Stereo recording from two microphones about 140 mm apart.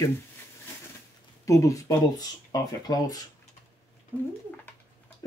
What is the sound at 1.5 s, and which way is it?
Speech, 25° left (ahead or behind).